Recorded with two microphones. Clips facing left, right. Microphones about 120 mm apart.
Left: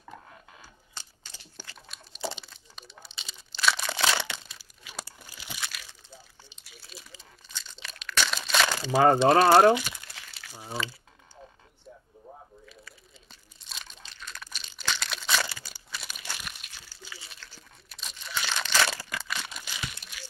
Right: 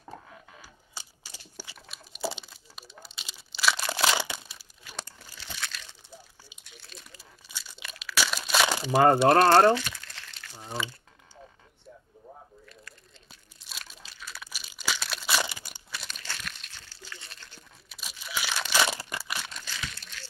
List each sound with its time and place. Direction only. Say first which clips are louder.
0.6 s a sound: right 1 dB; 10° right (ahead or behind)
2.4 s crumpling: even; 5° right (ahead or behind)
4.8 s crumpling: even; 5° left (ahead or behind)
6.6 s a sound: even; 5° left (ahead or behind)
7.2 s crumpling: even; 10° right (ahead or behind); by 10.8 s 10° left (ahead or behind)
12.6 s crunch: left 1 dB; centre (ahead or behind)
15.4 s crumpling: right 1 dB; 20° right (ahead or behind)
16.0 s crumpling: even; 10° left (ahead or behind)
17.6 s crumpling: even; 5° right (ahead or behind)
19.6 s crumpling: even; 15° left (ahead or behind)